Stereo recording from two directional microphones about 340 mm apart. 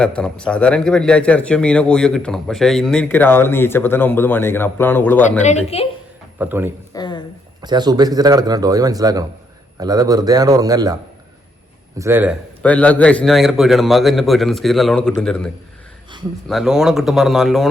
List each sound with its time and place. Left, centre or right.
0.0 s speech: centre
5.4 s a woman's voice: centre
6.4 s a man's voice: centre
6.9 s a sound: centre
7.6 s a man's voice: centre
11.9 s speech: centre